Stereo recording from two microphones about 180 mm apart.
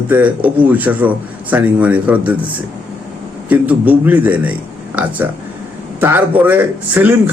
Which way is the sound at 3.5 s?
10° right (ahead or behind).